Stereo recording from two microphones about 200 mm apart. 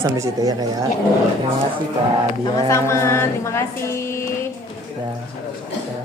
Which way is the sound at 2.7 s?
15° left (ahead or behind).